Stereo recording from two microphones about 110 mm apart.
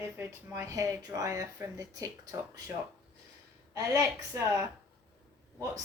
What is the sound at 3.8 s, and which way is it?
Speech, 30° right (ahead or behind).